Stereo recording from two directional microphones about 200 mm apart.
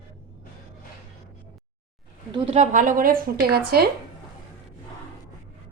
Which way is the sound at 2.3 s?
25° right (ahead or behind).